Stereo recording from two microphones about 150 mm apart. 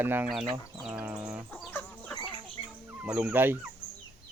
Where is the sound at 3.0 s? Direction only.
10° right (ahead or behind).